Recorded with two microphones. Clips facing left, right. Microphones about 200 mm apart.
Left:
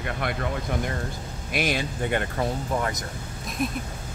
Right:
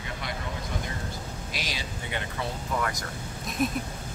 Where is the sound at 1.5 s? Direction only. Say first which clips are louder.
Left 13 dB; 55° left (ahead or behind).